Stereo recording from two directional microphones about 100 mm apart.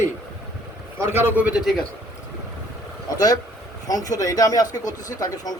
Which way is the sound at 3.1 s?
35° left (ahead or behind).